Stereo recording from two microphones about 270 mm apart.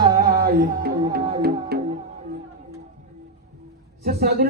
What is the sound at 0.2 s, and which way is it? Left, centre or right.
Music, right.